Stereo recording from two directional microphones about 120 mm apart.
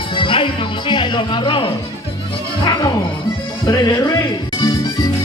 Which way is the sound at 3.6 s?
35° left (ahead or behind).